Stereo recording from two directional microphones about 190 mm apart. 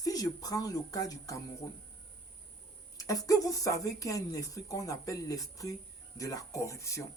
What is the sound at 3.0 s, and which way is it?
Speech, 20° left (ahead or behind).